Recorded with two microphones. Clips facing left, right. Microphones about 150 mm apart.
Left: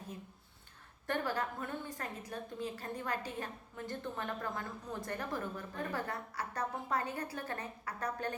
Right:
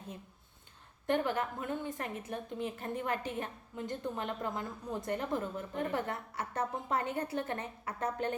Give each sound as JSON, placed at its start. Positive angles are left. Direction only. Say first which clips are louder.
{"t": 1.0, "sound": "a woman's voice", "louder": "right 4 dB", "side_deg": -20}